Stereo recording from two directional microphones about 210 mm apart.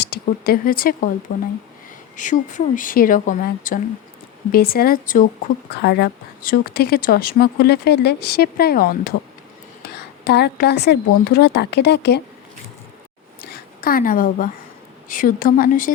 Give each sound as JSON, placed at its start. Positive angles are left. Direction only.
{"t": 0.0, "sound": "speech", "side_deg": 50}
{"t": 2.1, "sound": "speech", "side_deg": 35}
{"t": 10.2, "sound": "speech", "side_deg": 50}
{"t": 13.4, "sound": "a sound", "side_deg": 45}
{"t": 15.1, "sound": "speech", "side_deg": 40}